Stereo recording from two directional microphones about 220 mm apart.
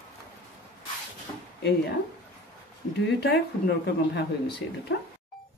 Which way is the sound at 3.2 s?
50° left (ahead or behind).